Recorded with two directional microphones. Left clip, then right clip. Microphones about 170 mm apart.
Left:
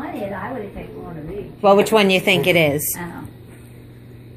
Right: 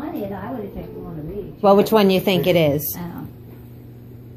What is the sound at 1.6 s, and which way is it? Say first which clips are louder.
A woman's voice: left 1 dB; 10° right (ahead or behind).